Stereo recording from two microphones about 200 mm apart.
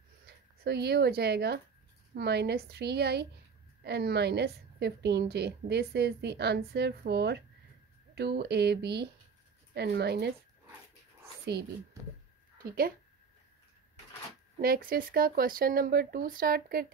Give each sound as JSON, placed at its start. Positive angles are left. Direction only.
{"t": 0.7, "sound": "a woman's voice", "side_deg": -55}
{"t": 12.5, "sound": "speech", "side_deg": -50}
{"t": 14.6, "sound": "speech", "side_deg": -45}